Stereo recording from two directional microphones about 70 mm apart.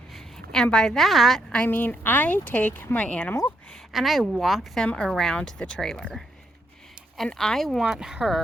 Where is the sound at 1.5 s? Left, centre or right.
Left.